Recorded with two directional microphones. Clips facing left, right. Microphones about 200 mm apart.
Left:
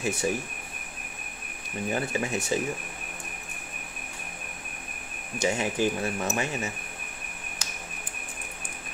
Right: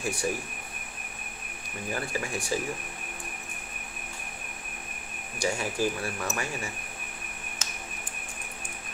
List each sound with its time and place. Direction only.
0.0 s speech: 25° left (ahead or behind)
1.9 s speech: 20° left (ahead or behind)
5.4 s speech: 20° left (ahead or behind)